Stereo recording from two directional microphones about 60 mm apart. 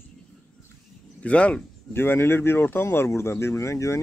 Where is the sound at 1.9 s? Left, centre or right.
Left.